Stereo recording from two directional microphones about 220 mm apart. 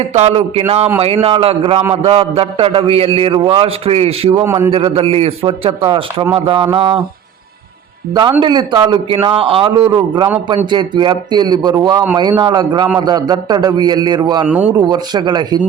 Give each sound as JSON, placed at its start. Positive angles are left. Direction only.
{"t": 0.0, "sound": "a man's voice", "side_deg": -30}
{"t": 4.4, "sound": "a man's voice", "side_deg": -10}
{"t": 4.7, "sound": "a man's voice", "side_deg": -25}
{"t": 8.1, "sound": "a man's voice", "side_deg": -20}
{"t": 14.4, "sound": "a man's voice", "side_deg": -5}
{"t": 14.8, "sound": "a man's voice", "side_deg": -20}